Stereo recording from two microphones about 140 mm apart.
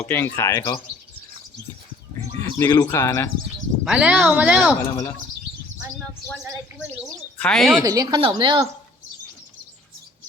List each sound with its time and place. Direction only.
0.0 s speech: 15° left (ahead or behind)
2.6 s speech: 20° left (ahead or behind)
3.8 s speech: 10° right (ahead or behind)
4.7 s speech: 20° left (ahead or behind)
7.3 s speech: 5° left (ahead or behind)
7.9 s a woman's voice: 25° right (ahead or behind)